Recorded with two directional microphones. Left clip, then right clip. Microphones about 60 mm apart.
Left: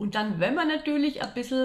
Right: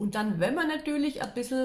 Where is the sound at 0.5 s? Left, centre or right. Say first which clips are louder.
Left 3 dB; centre.